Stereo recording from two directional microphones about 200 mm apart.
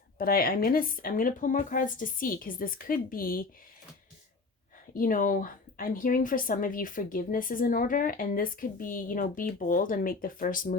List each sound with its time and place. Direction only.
0.2 s speech: 45° left (ahead or behind)
4.9 s speech: 40° left (ahead or behind)